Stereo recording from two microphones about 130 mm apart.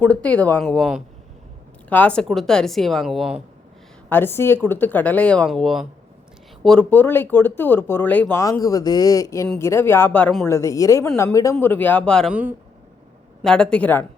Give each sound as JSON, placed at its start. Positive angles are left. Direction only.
{"t": 0.0, "sound": "a woman's voice", "side_deg": 10}
{"t": 4.1, "sound": "speech", "side_deg": 15}
{"t": 5.5, "sound": "a woman's voice", "side_deg": 0}
{"t": 8.4, "sound": "speech", "side_deg": 25}
{"t": 11.6, "sound": "speech", "side_deg": 15}
{"t": 12.3, "sound": "speech", "side_deg": -10}
{"t": 13.4, "sound": "speech", "side_deg": 5}